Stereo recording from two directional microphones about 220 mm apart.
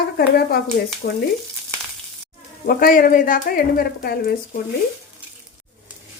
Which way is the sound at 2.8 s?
40° left (ahead or behind).